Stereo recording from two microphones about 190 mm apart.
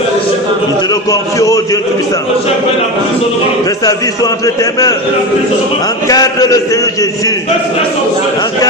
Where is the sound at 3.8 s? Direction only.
20° left (ahead or behind).